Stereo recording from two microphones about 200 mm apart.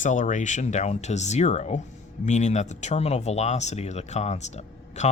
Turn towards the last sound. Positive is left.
turn(degrees=35)  # may be behind; listen again after turning